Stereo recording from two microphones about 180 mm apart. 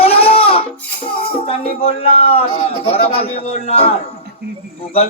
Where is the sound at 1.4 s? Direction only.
30° left (ahead or behind).